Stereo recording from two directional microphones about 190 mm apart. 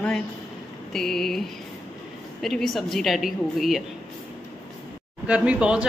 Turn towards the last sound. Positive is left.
turn(degrees=-5)  # may be behind; listen again after turning